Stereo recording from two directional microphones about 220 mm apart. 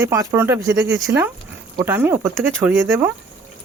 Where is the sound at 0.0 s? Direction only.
10° right (ahead or behind).